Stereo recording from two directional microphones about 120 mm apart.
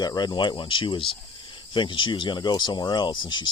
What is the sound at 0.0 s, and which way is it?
Speech, 35° left (ahead or behind).